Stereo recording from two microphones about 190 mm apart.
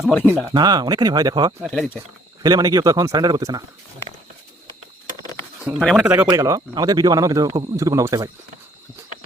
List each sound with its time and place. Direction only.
0.5 s a man's voice: 20° right (ahead or behind)
1.6 s speech: centre (ahead or behind)
2.4 s a man's voice: 20° right (ahead or behind)
5.6 s speech: centre (ahead or behind)
6.1 s a man's voice: 15° right (ahead or behind)